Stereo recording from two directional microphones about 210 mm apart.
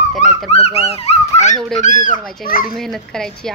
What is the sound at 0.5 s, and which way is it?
A child's voice, 30° left (ahead or behind).